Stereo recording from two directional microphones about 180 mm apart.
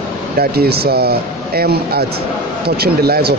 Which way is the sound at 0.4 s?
60° right (ahead or behind).